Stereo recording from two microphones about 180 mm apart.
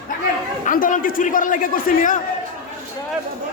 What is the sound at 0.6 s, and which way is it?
A man's voice, 50° left (ahead or behind).